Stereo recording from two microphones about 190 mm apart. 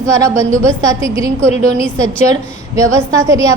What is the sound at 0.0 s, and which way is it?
A woman's voice, 15° right (ahead or behind).